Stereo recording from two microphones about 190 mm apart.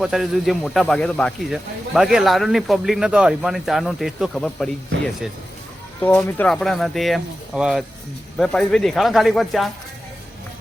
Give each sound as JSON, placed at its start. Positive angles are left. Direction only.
{"t": 0.0, "sound": "speech", "side_deg": 0}
{"t": 6.0, "sound": "speech", "side_deg": 10}